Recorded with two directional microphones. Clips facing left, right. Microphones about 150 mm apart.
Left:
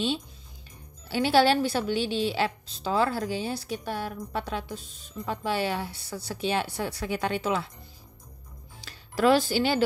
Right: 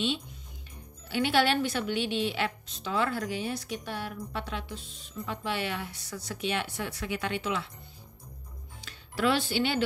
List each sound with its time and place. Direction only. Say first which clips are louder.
1.0 s a woman's voice: left 4 dB; 35° left (ahead or behind)
8.8 s speech: left 5 dB; 40° left (ahead or behind)